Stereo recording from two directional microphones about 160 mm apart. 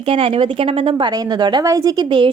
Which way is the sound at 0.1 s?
35° right (ahead or behind).